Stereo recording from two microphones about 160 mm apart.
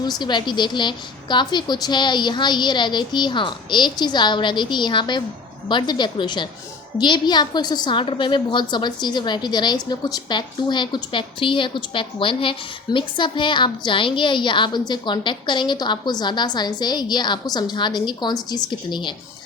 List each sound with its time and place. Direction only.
0.0 s a woman's voice: 25° left (ahead or behind)